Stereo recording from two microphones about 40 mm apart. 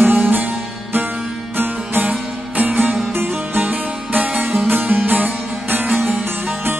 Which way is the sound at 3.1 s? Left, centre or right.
Right.